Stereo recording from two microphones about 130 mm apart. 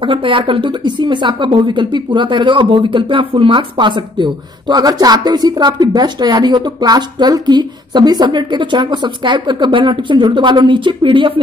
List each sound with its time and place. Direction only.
0.0 s a woman's voice: 40° right (ahead or behind)